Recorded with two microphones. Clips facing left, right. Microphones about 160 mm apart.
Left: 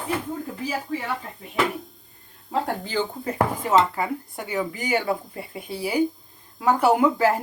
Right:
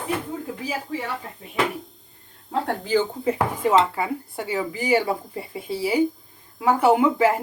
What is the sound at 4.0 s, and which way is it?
Speech, 25° right (ahead or behind).